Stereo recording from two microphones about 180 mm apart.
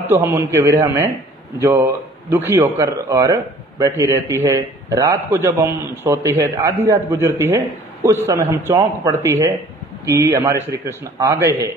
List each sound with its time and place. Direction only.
0.0 s a man's voice: 10° right (ahead or behind)